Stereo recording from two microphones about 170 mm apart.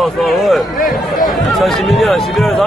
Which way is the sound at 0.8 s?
60° left (ahead or behind).